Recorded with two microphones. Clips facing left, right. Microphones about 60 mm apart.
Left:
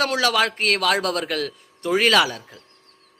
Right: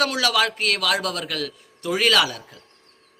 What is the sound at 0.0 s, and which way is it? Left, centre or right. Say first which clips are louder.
A man's voice: left 1 dB; left.